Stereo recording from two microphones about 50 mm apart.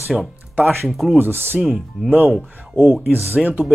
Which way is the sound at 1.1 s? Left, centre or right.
Right.